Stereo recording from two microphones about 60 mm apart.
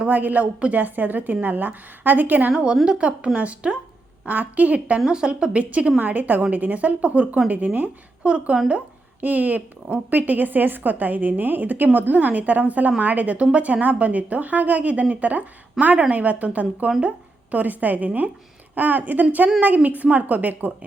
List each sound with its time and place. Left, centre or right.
0.0 s a woman's voice: right
2.5 s a woman's voice: centre